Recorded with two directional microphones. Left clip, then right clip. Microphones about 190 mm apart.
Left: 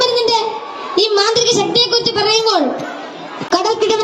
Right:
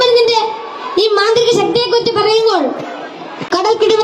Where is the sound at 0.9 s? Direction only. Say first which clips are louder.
Right 2 dB; 15° right (ahead or behind).